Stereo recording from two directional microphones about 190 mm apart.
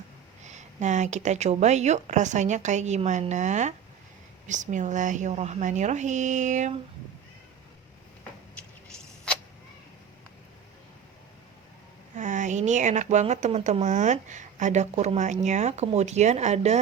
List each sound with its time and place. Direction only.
0.4 s speech: 40° right (ahead or behind)
12.1 s speech: 40° right (ahead or behind)